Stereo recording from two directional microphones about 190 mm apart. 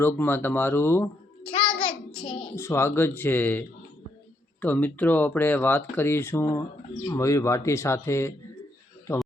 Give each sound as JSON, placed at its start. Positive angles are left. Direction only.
{"t": 0.0, "sound": "speech", "side_deg": 10}
{"t": 1.5, "sound": "child singing", "side_deg": 30}
{"t": 1.7, "sound": "child singing", "side_deg": 5}
{"t": 2.6, "sound": "a man's voice", "side_deg": 15}